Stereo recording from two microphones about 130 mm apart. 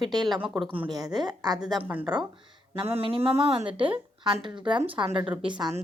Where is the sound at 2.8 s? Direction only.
45° right (ahead or behind).